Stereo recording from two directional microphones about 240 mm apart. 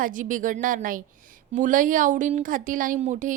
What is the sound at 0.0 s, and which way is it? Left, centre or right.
A woman's voice, right.